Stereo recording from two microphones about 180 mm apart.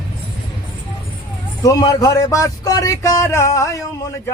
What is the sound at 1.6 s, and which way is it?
Speech, 20° left (ahead or behind).